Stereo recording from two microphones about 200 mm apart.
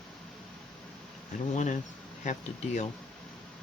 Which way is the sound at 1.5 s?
35° left (ahead or behind).